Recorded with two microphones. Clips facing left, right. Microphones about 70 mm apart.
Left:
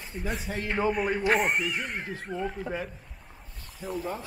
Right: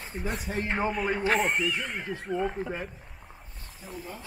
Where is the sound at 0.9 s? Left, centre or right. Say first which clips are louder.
Left 3 dB; centre.